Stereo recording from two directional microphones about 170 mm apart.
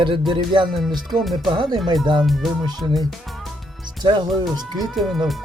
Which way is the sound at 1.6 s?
25° right (ahead or behind).